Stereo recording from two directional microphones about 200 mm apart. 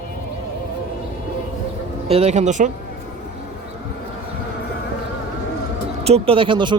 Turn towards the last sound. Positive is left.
turn(degrees=-25)  # may be behind; listen again after turning